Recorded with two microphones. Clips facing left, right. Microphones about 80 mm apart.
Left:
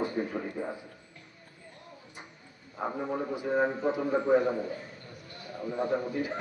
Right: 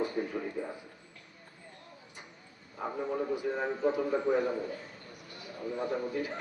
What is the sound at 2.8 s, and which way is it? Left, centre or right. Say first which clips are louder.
Speech: left 3 dB; left.